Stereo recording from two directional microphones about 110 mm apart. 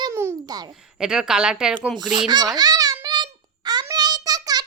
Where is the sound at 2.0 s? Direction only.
40° right (ahead or behind).